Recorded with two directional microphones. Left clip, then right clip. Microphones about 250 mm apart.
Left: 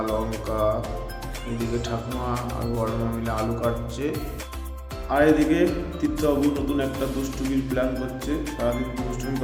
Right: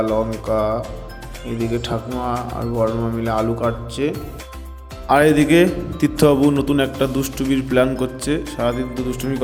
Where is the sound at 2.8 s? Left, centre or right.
Right.